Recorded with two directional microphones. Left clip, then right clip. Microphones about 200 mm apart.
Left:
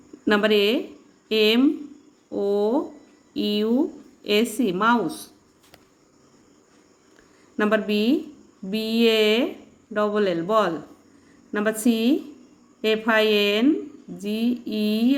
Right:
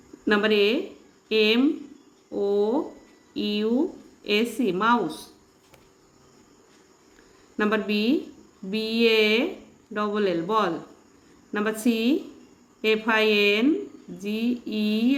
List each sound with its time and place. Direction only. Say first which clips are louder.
0.3 s a woman's voice: left 2 dB; 25° left (ahead or behind)
7.5 s a woman's voice: left 3 dB; 20° left (ahead or behind)